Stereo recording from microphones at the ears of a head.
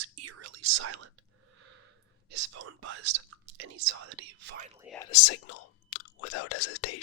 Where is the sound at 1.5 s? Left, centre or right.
Right.